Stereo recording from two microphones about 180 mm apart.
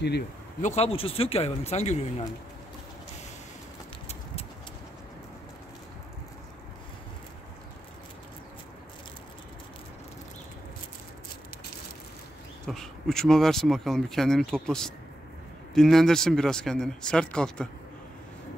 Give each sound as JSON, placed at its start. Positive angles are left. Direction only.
{"t": 0.6, "sound": "speech", "side_deg": 40}
{"t": 12.6, "sound": "speech", "side_deg": 5}